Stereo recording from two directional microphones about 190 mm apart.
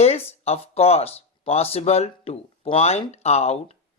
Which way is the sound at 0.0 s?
35° left (ahead or behind).